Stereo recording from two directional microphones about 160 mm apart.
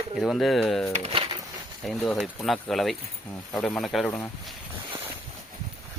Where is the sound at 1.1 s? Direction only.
35° right (ahead or behind).